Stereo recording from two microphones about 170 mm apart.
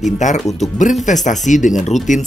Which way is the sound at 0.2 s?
45° left (ahead or behind).